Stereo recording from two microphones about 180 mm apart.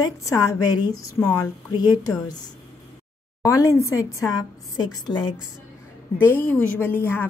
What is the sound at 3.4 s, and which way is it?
A woman's voice, 15° left (ahead or behind).